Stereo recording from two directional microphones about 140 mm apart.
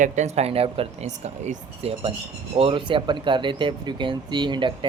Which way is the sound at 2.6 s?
40° right (ahead or behind).